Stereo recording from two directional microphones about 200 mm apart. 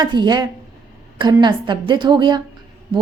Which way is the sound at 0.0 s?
20° right (ahead or behind).